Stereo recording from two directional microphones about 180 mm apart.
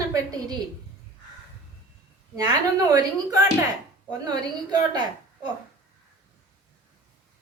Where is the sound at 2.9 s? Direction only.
20° right (ahead or behind).